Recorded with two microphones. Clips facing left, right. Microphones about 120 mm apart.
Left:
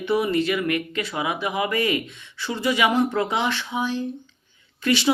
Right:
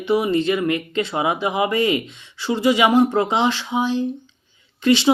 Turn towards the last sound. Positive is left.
turn(degrees=-20)  # may be behind; listen again after turning